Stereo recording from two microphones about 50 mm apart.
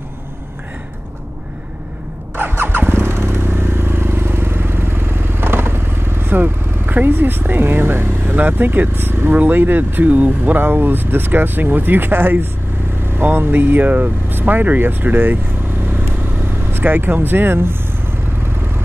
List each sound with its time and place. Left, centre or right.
2.3 s motorcycle: right
8.4 s speech: right
16.7 s speech: right